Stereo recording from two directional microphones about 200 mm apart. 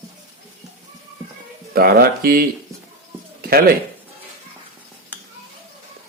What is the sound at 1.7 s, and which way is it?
Speech, 50° right (ahead or behind).